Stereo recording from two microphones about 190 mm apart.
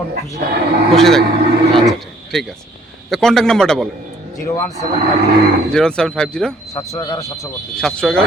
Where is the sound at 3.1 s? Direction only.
Centre (ahead or behind).